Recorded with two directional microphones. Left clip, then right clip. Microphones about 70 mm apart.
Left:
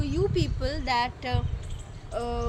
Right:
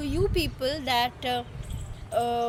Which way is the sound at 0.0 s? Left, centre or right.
Left.